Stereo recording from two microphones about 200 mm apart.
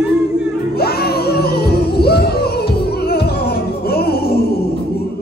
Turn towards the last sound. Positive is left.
turn(degrees=50)  # may be behind; listen again after turning